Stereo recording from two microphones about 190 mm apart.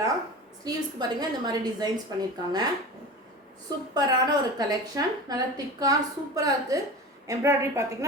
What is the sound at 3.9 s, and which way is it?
A woman's voice, 20° right (ahead or behind).